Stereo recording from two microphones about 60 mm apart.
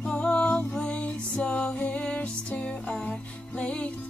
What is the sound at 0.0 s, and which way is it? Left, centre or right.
Music, centre.